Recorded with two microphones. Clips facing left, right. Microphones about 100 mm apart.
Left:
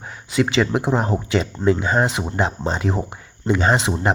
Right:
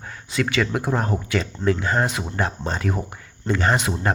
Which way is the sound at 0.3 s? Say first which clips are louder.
Left 4 dB; 20° left (ahead or behind).